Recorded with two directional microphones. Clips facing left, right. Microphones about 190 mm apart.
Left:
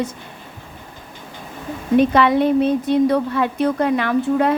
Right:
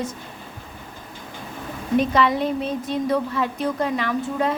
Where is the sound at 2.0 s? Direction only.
60° left (ahead or behind).